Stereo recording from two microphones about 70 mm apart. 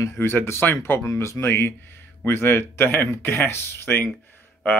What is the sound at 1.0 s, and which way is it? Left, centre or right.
Speech, left.